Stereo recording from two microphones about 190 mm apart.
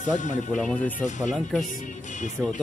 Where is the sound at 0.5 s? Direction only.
Centre (ahead or behind).